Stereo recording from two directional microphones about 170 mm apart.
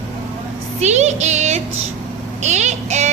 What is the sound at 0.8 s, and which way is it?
Child singing, 40° right (ahead or behind).